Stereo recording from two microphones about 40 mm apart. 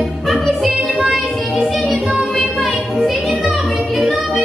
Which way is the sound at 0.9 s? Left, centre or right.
Centre.